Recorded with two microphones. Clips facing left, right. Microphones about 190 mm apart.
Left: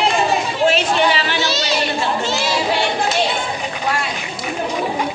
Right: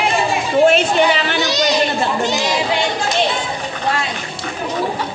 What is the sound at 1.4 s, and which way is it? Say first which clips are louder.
Chatter: right 4 dB; 15° right (ahead or behind).